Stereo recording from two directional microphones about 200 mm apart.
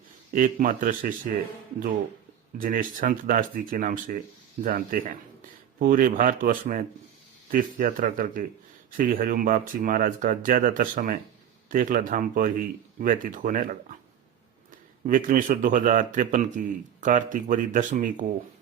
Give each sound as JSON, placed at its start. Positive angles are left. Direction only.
{"t": 0.3, "sound": "speech", "side_deg": -40}
{"t": 2.6, "sound": "speech", "side_deg": -45}
{"t": 15.0, "sound": "a man's voice", "side_deg": -40}